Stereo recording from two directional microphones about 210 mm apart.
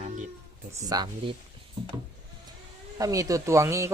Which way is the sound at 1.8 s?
20° right (ahead or behind).